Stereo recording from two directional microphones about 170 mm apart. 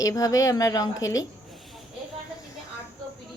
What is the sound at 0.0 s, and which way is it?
Speech, 20° left (ahead or behind).